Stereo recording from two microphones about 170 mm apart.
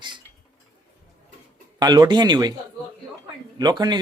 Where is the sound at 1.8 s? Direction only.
25° right (ahead or behind).